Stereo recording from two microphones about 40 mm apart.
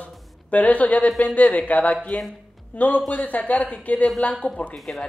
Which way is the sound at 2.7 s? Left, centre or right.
Left.